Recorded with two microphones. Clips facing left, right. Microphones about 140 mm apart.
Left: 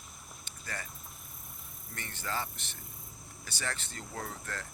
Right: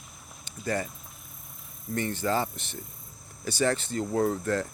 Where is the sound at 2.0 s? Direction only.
25° right (ahead or behind).